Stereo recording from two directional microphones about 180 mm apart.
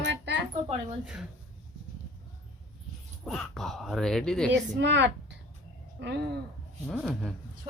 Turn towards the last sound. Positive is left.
turn(degrees=0)  # may be behind; listen again after turning